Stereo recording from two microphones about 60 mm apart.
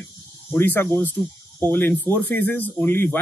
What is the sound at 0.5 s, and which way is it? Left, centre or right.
Speech, left.